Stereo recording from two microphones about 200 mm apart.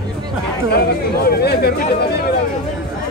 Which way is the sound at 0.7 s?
50° left (ahead or behind).